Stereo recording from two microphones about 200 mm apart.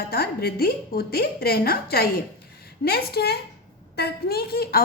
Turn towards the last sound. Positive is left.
turn(degrees=50)  # may be behind; listen again after turning